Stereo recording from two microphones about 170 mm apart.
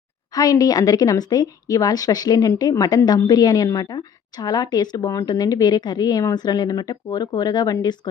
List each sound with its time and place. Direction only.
0.3 s a woman's voice: 20° left (ahead or behind)